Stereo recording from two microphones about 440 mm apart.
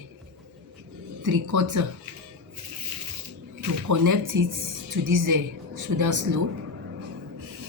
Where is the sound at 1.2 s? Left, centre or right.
Right.